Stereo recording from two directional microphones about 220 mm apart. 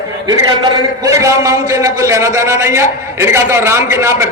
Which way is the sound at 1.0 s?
15° right (ahead or behind).